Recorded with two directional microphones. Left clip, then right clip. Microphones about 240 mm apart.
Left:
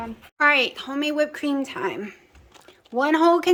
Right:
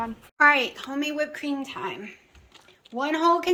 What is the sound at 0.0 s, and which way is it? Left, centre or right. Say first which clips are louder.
Speech: right 1 dB; centre.